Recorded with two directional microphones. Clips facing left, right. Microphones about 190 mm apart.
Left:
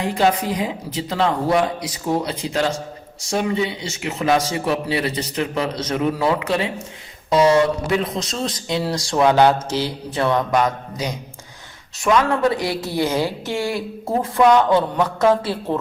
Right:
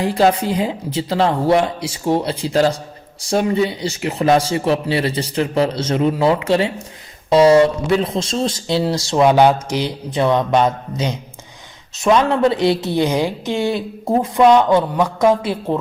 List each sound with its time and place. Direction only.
0.0 s speech: 35° right (ahead or behind)
7.9 s a woman's voice: 30° right (ahead or behind)